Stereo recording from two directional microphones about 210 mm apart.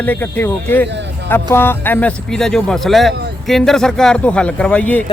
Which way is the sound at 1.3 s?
10° left (ahead or behind).